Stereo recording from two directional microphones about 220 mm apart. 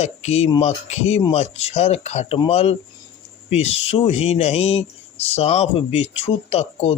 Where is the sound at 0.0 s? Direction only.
30° left (ahead or behind).